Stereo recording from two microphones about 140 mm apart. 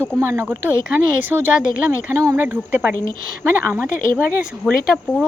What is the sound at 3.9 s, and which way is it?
Speech, 75° left (ahead or behind).